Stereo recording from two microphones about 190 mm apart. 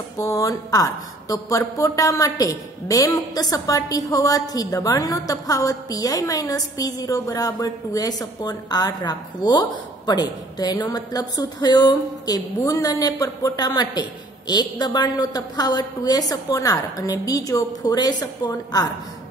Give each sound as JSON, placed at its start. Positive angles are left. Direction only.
{"t": 0.2, "sound": "a woman's voice", "side_deg": 15}